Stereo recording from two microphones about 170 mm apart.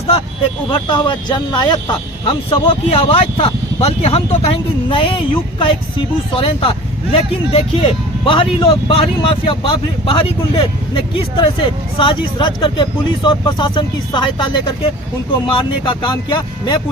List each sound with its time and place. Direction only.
0.7 s speech: 25° left (ahead or behind)